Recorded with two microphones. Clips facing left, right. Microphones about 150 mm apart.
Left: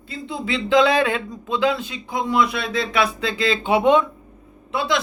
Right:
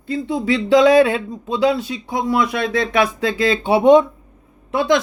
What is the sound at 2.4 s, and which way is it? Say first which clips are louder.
Speech: even; 50° right (ahead or behind).